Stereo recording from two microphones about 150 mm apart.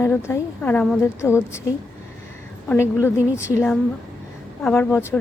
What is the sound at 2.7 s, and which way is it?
Speech, 15° left (ahead or behind).